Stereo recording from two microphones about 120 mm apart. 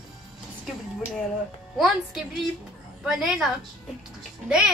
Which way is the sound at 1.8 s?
Centre (ahead or behind).